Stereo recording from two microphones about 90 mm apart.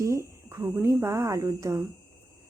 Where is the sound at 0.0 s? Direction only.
30° right (ahead or behind).